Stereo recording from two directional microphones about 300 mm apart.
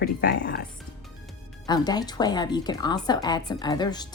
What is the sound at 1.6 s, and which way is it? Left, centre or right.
Speech, centre.